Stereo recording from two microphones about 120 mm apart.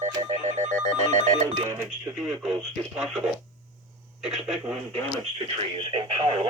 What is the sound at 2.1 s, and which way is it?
Speech, 5° right (ahead or behind).